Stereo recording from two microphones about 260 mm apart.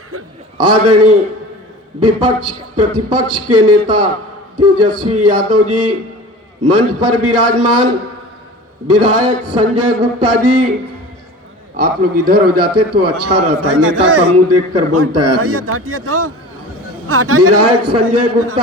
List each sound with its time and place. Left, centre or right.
0.6 s a man's voice: right
8.9 s a man's voice: right
12.2 s a man's voice: right
13.0 s a man's voice: right